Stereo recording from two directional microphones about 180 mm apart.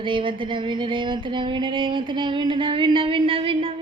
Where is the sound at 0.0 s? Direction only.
30° right (ahead or behind).